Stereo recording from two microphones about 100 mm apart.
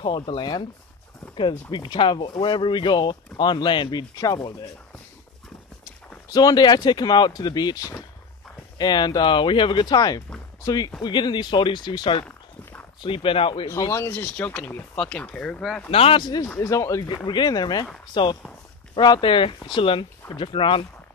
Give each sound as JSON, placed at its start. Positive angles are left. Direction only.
{"t": 0.0, "sound": "speech", "side_deg": 55}
{"t": 6.3, "sound": "speech", "side_deg": 45}
{"t": 11.0, "sound": "speech", "side_deg": 50}
{"t": 13.7, "sound": "speech", "side_deg": 30}
{"t": 15.9, "sound": "speech", "side_deg": 75}
{"t": 16.2, "sound": "speech", "side_deg": 45}
{"t": 16.5, "sound": "speech", "side_deg": 30}
{"t": 17.3, "sound": "speech", "side_deg": 45}